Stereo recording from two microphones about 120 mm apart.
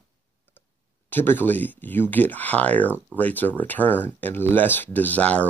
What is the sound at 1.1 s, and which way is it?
Speech, 15° left (ahead or behind).